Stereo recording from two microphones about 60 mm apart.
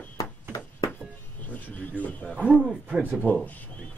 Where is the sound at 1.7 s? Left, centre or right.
Left.